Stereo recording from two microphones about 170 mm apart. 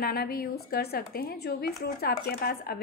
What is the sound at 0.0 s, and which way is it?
Speech, 65° left (ahead or behind).